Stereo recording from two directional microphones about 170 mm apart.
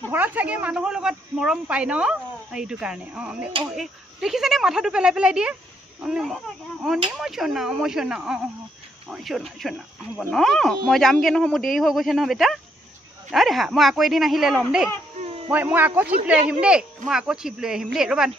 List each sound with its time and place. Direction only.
0.1 s speech: 10° right (ahead or behind)
15.2 s a sound: 35° right (ahead or behind)
15.5 s speech: 10° right (ahead or behind)